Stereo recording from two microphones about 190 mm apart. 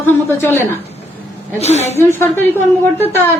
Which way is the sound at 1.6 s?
35° left (ahead or behind).